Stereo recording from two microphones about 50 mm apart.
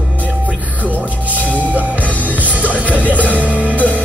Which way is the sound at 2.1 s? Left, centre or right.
Left.